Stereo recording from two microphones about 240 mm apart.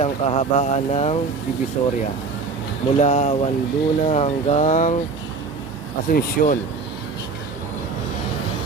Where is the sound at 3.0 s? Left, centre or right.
Left.